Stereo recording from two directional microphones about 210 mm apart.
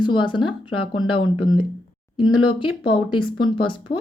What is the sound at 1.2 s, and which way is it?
Speech, 80° left.